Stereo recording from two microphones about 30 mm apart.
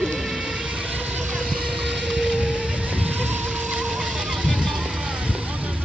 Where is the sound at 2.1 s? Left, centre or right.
Right.